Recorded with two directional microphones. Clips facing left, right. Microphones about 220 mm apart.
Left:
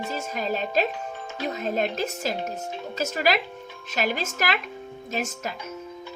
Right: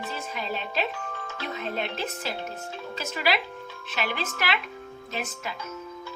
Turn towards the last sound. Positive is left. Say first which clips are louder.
# left 4 dB
turn(degrees=45)  # may be behind; listen again after turning